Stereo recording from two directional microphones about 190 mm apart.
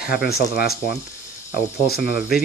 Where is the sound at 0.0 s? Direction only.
55° left (ahead or behind).